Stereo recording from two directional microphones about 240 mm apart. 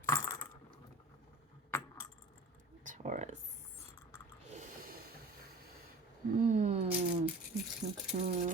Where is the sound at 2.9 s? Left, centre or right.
Right.